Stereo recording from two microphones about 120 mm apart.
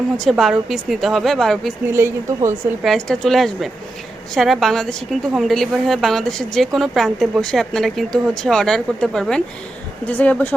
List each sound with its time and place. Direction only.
0.3 s speech: centre (ahead or behind)
1.9 s a woman's voice: 20° right (ahead or behind)
2.8 s speech: centre (ahead or behind)